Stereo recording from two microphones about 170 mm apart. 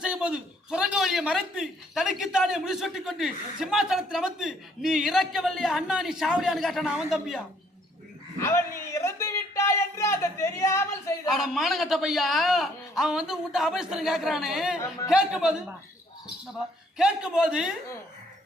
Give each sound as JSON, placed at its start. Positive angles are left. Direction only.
{"t": 0.0, "sound": "a man's voice", "side_deg": -5}
{"t": 8.4, "sound": "speech", "side_deg": 15}
{"t": 11.3, "sound": "a man's voice", "side_deg": 0}
{"t": 17.0, "sound": "a man's voice", "side_deg": -5}